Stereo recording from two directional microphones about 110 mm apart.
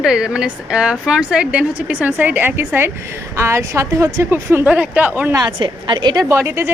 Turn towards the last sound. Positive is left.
turn(degrees=-20)  # may be behind; listen again after turning